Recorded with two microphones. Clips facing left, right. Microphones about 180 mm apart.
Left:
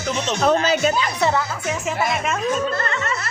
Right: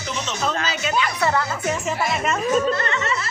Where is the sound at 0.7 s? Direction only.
45° left (ahead or behind).